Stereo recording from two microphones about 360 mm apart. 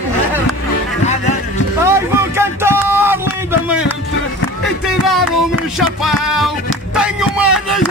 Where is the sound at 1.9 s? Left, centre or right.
Centre.